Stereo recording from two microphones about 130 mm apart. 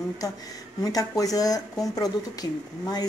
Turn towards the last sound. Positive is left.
turn(degrees=30)  # may be behind; listen again after turning